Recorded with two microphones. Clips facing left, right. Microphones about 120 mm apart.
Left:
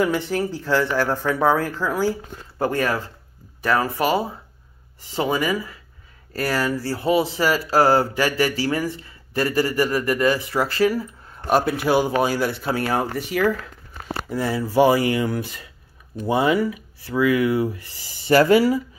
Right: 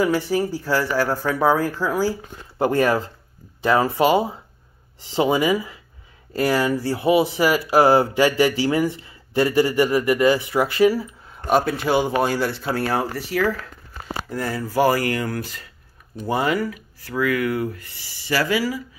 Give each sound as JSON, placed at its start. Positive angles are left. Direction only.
{"t": 0.0, "sound": "speech", "side_deg": -5}
{"t": 2.6, "sound": "speech", "side_deg": -25}
{"t": 9.8, "sound": "speech", "side_deg": -10}
{"t": 10.9, "sound": "a sound", "side_deg": -10}
{"t": 11.4, "sound": "speech", "side_deg": 5}
{"t": 14.9, "sound": "speech", "side_deg": 20}
{"t": 16.3, "sound": "speech", "side_deg": 20}
{"t": 18.3, "sound": "speech", "side_deg": 40}